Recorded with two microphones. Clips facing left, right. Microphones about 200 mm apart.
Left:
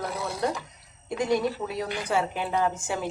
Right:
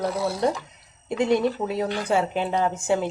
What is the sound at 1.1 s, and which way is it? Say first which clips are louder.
A woman's voice: right 4 dB; 25° right (ahead or behind).